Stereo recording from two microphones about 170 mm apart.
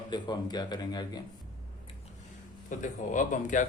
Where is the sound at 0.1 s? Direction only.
25° left (ahead or behind).